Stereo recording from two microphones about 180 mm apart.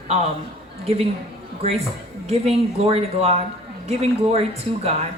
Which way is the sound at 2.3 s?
35° right (ahead or behind).